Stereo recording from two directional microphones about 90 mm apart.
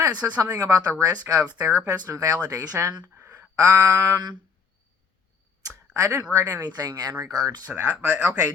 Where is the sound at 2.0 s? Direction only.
40° right (ahead or behind).